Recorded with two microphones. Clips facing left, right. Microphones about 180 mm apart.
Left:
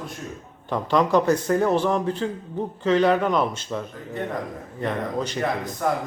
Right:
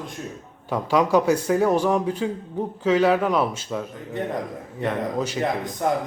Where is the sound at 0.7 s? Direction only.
10° right (ahead or behind).